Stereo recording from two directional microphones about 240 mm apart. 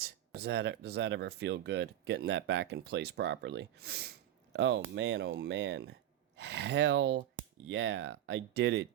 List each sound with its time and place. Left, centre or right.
0.3 s speech: right